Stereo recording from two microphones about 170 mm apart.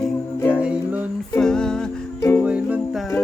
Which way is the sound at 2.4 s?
5° right (ahead or behind).